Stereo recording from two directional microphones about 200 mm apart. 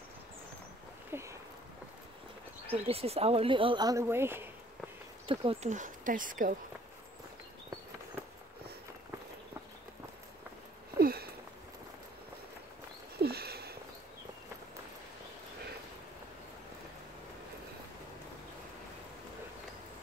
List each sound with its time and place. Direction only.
1.1 s a sound: 15° right (ahead or behind)
2.7 s speech: 30° right (ahead or behind); by 4.5 s 10° right (ahead or behind)
5.2 s speech: 25° right (ahead or behind); by 6.5 s 40° right (ahead or behind)
11.0 s sniff: 50° right (ahead or behind)
13.2 s sniff: 50° right (ahead or behind)